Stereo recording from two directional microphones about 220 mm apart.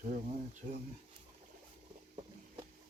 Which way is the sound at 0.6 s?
25° right (ahead or behind).